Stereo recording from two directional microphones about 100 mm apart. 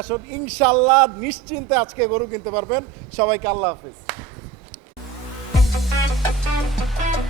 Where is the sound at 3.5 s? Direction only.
30° right (ahead or behind).